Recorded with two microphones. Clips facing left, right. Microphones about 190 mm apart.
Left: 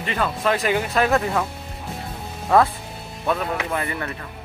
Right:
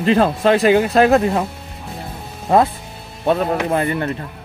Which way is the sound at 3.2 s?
35° right (ahead or behind).